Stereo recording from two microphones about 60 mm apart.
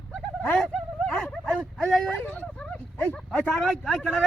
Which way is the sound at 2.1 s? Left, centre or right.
Left.